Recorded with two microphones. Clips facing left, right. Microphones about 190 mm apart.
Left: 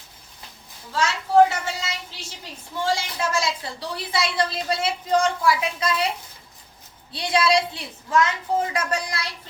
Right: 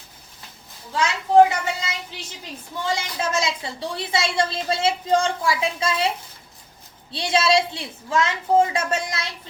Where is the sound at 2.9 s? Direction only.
20° right (ahead or behind).